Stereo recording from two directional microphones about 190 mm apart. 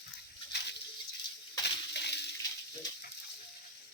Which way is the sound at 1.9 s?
60° left (ahead or behind).